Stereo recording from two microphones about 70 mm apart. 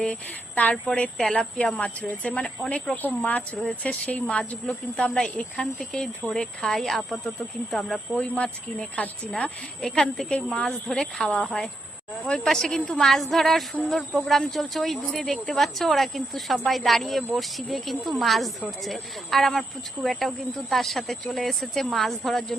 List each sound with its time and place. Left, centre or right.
0.5 s a woman's voice: left; by 8.0 s centre
8.1 s speech: centre